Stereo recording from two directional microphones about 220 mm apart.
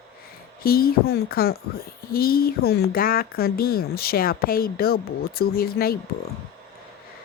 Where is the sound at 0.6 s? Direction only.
40° left (ahead or behind).